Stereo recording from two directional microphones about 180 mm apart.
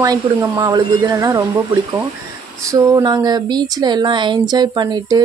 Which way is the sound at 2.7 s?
20° right (ahead or behind).